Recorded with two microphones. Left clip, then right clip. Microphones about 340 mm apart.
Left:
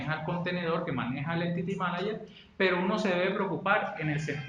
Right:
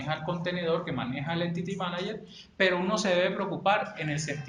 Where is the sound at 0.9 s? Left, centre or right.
Right.